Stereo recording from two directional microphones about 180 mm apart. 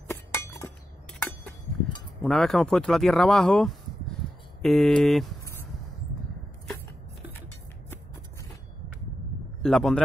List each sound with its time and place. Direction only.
0.1 s chink: 15° left (ahead or behind)
2.2 s speech: centre (ahead or behind)
9.6 s speech: centre (ahead or behind)